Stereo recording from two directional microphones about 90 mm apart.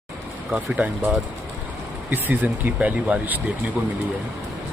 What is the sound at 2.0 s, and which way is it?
Speech, 20° right (ahead or behind).